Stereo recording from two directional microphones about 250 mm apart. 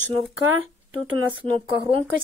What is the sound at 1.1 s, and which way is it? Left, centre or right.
Speech, centre.